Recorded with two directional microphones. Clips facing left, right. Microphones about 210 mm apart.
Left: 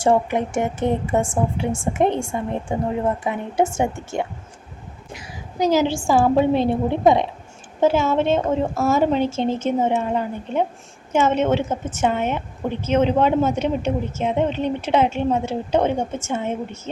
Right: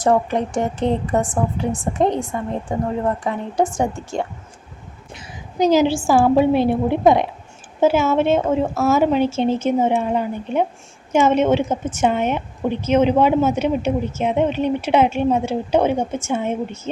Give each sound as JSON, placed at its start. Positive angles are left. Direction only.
{"t": 0.3, "sound": "speech", "side_deg": 20}
{"t": 5.5, "sound": "a woman's voice", "side_deg": -20}
{"t": 6.1, "sound": "a woman's voice", "side_deg": -5}